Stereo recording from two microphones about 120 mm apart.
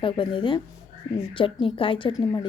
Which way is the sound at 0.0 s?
45° left (ahead or behind).